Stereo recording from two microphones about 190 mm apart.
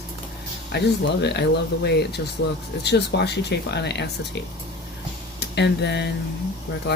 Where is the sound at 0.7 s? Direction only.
60° left (ahead or behind).